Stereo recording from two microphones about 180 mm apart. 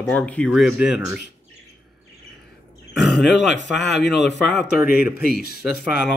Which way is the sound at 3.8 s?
70° left (ahead or behind).